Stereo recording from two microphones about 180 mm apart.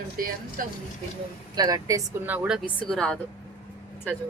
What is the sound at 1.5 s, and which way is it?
A woman's voice, 20° right (ahead or behind).